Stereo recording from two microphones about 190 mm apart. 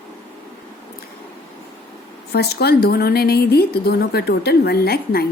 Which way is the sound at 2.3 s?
55° left (ahead or behind).